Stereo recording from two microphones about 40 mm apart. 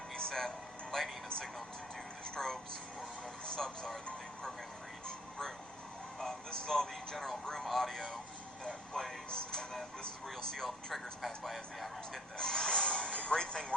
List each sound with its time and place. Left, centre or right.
0.2 s music: centre
2.2 s speech: centre
6.1 s speech: centre
9.3 s speech: centre
12.4 s speech: centre